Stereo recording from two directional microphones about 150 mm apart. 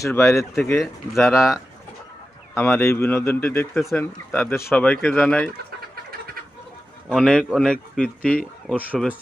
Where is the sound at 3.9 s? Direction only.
15° left (ahead or behind).